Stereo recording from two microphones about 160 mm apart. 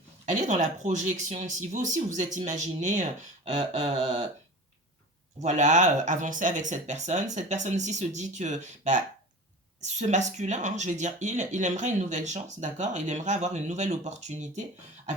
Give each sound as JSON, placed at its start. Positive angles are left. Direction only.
{"t": 0.3, "sound": "speech", "side_deg": -45}
{"t": 3.8, "sound": "a sound", "side_deg": -35}
{"t": 5.4, "sound": "speech", "side_deg": -50}